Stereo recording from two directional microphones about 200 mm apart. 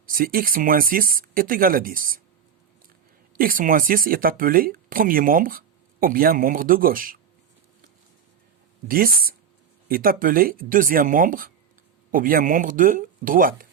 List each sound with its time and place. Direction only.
0.0 s speech: 45° right (ahead or behind)
3.3 s speech: 45° right (ahead or behind)
8.9 s speech: 45° right (ahead or behind)